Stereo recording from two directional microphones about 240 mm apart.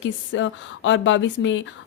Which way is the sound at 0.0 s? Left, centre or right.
Left.